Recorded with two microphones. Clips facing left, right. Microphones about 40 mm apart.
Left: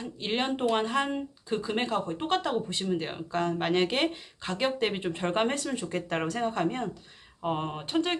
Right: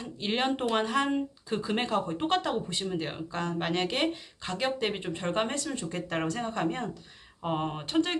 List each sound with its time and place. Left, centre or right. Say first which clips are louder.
0.2 s speech: even; centre
3.4 s speech: left 3 dB; centre
5.1 s speech: left 2 dB; centre